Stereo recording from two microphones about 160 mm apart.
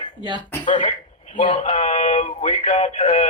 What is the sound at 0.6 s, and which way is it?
Speech, 50° left (ahead or behind).